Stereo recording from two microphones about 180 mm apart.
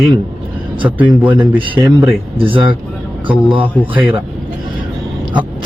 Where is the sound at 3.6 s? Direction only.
10° left (ahead or behind).